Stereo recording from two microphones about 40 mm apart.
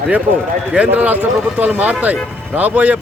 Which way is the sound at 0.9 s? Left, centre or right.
Right.